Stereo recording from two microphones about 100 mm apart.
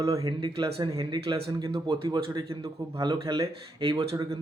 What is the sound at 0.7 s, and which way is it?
Speech, 70° right (ahead or behind).